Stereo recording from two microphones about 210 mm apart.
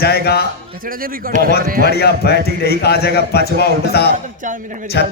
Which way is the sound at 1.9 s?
50° left (ahead or behind).